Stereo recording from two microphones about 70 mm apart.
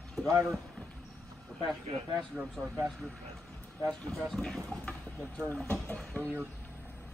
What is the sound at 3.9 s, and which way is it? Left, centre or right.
Speech, centre.